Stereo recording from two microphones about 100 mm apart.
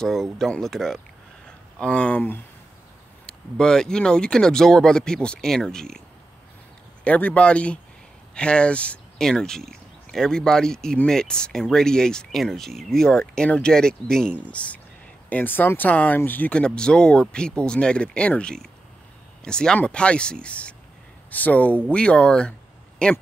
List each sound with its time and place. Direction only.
0.0 s speech: 5° left (ahead or behind)
7.1 s speech: 15° left (ahead or behind)